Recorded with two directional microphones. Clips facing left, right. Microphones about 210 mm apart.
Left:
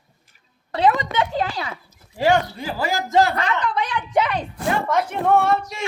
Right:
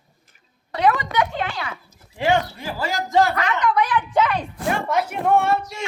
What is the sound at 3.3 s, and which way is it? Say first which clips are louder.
Speech: right 2 dB; 30° left (ahead or behind).